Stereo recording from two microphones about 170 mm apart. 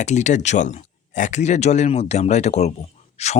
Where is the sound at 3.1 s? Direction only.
40° left (ahead or behind).